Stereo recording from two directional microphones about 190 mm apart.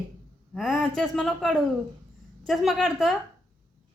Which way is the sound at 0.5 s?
Centre (ahead or behind).